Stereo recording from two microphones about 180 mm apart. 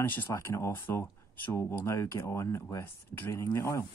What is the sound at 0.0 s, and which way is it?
Speech, 15° left (ahead or behind).